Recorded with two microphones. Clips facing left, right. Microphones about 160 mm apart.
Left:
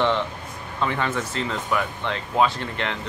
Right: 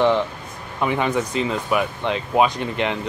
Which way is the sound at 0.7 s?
15° right (ahead or behind).